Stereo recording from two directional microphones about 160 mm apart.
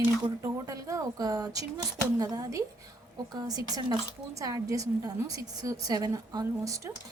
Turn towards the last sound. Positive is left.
turn(degrees=-20)  # may be behind; listen again after turning